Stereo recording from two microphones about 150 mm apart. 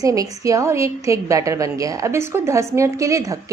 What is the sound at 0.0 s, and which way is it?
A woman's voice, 25° right (ahead or behind).